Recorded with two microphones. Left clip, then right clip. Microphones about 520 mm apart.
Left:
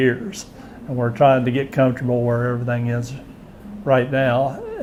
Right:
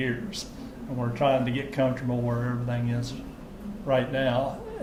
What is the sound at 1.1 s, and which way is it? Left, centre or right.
Speech, left.